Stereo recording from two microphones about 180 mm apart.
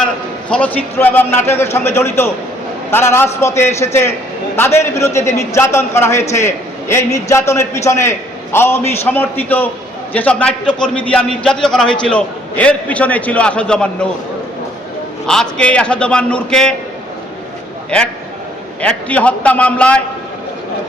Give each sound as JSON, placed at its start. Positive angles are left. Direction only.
{"t": 0.5, "sound": "a man's voice", "side_deg": 10}
{"t": 15.3, "sound": "a man's voice", "side_deg": 5}
{"t": 17.9, "sound": "a man's voice", "side_deg": 5}